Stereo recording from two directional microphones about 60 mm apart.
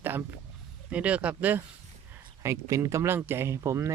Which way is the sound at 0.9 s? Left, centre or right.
Right.